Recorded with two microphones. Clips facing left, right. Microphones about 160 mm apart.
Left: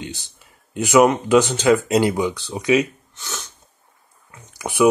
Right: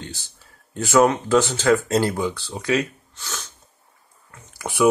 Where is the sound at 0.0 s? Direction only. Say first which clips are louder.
Left 4 dB; 20° left (ahead or behind).